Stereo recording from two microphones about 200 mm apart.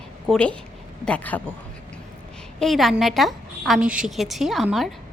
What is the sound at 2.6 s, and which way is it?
A woman's voice, centre (ahead or behind).